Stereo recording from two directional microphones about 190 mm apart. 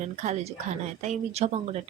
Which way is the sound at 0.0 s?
40° right (ahead or behind).